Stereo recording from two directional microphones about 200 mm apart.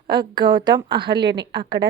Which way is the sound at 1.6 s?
55° right (ahead or behind).